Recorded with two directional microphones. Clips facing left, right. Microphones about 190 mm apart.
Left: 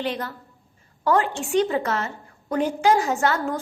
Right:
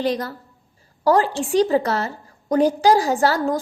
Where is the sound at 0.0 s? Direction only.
40° right (ahead or behind).